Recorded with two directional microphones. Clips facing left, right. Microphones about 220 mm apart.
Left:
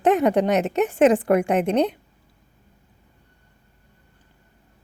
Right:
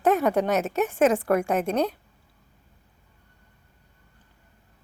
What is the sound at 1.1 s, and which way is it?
Speech, 15° left (ahead or behind).